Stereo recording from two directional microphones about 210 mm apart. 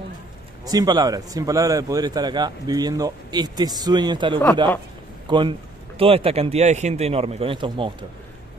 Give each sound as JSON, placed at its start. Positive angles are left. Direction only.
{"t": 0.7, "sound": "a man's voice", "side_deg": -20}